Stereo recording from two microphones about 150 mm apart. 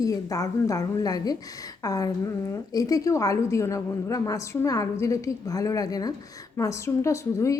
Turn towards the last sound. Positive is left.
turn(degrees=20)  # may be behind; listen again after turning